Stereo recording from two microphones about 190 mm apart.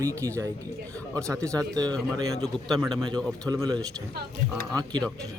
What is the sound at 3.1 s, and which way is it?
Speech, 20° right (ahead or behind).